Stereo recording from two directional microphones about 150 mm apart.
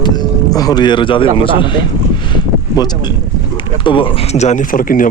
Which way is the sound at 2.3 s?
25° left (ahead or behind).